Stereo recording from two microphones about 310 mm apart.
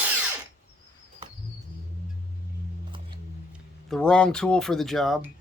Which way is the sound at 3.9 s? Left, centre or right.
Centre.